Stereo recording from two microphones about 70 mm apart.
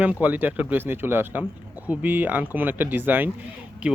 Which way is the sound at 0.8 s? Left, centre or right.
Right.